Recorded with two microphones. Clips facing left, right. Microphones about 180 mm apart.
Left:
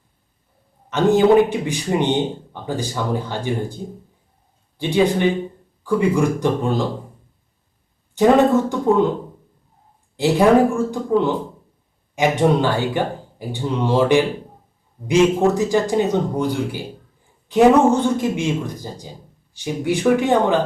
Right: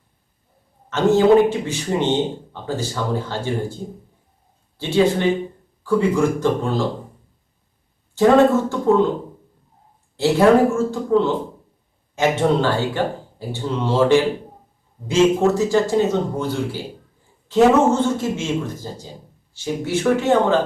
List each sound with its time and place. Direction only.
0.9 s speech: 15° left (ahead or behind)
4.8 s speech: 15° left (ahead or behind)
8.1 s speech: 15° left (ahead or behind)
10.2 s speech: 15° left (ahead or behind)